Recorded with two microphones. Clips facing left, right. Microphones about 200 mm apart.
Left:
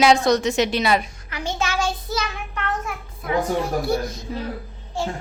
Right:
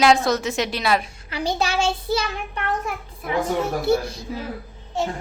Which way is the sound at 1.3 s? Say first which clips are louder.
Right 2 dB; 35° right (ahead or behind).